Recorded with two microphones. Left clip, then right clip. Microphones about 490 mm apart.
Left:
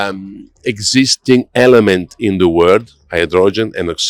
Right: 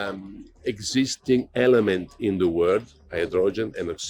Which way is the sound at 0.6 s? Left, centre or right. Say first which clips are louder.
Left 12 dB; left.